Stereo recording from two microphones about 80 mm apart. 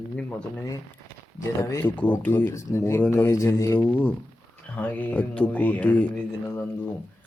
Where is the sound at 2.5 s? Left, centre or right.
Left.